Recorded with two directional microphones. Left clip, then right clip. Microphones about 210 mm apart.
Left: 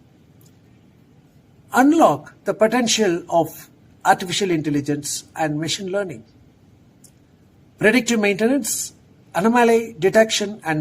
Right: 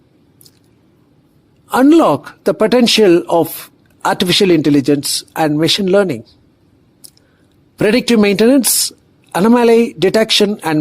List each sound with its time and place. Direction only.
1.7 s speech: 45° right (ahead or behind)
7.8 s speech: 45° right (ahead or behind)